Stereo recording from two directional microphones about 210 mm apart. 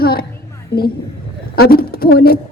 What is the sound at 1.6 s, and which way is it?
Speech, 45° left (ahead or behind).